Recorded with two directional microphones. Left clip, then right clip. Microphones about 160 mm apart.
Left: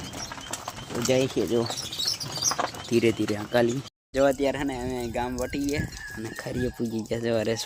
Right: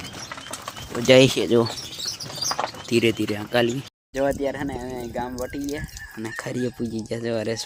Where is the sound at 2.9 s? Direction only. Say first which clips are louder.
Right 2 dB; 10° right (ahead or behind).